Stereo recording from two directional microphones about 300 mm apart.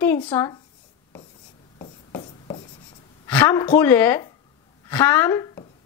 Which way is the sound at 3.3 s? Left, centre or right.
Centre.